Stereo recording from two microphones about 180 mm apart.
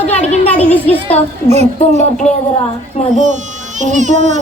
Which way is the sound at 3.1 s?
45° right (ahead or behind).